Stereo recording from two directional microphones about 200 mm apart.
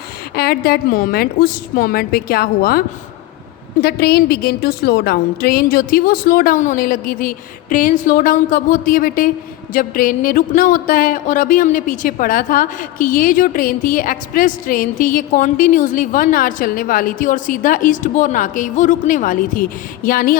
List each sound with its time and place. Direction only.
0.3 s speech: 50° left (ahead or behind)